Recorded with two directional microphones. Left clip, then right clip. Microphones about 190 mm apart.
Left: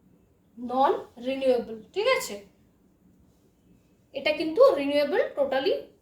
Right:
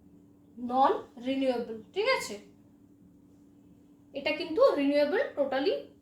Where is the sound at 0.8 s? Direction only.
30° left (ahead or behind).